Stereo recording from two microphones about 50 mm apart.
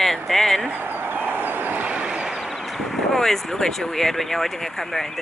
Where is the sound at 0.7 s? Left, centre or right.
Right.